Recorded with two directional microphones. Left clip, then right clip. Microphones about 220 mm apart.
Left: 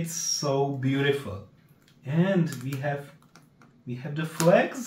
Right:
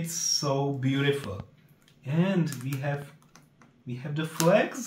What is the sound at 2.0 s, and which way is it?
Speech, 10° right (ahead or behind).